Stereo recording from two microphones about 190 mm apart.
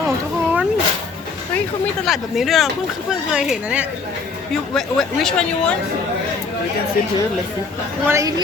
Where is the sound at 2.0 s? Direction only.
Centre (ahead or behind).